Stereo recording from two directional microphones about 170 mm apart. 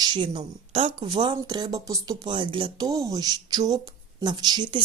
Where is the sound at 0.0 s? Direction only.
25° right (ahead or behind).